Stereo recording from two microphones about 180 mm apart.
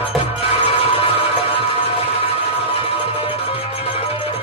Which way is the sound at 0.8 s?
30° left (ahead or behind).